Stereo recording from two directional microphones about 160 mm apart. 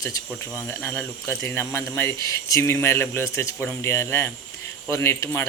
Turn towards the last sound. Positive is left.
turn(degrees=15)  # may be behind; listen again after turning